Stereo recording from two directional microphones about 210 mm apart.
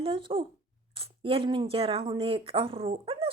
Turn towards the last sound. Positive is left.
turn(degrees=-25)  # may be behind; listen again after turning